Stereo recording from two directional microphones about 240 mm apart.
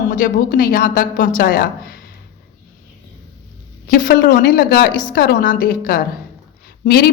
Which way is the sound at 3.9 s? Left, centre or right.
Left.